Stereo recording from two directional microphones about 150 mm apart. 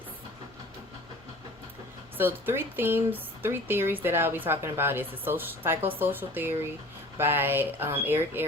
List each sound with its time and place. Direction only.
2.1 s speech: 15° right (ahead or behind)